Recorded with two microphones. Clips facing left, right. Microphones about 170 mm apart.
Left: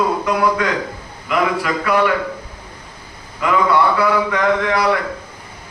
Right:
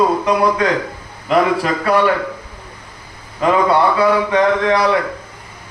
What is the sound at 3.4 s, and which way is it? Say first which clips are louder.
A man's voice: right 2 dB; 30° right (ahead or behind).